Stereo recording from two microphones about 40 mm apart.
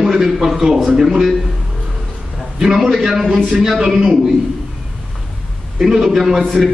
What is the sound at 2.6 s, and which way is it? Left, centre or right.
A man's voice, centre.